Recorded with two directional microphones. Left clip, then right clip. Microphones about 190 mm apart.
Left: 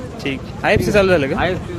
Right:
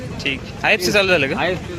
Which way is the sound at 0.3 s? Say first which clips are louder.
Even; 20° left (ahead or behind).